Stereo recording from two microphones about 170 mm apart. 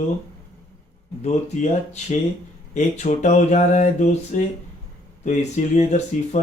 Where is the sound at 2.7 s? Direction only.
45° left (ahead or behind).